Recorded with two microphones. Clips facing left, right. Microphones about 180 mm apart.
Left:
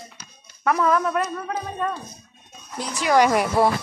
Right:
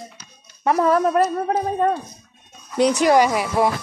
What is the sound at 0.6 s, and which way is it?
Speech, 35° right (ahead or behind).